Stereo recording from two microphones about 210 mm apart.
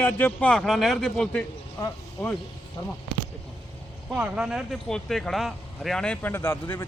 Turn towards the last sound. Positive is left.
turn(degrees=10)  # may be behind; listen again after turning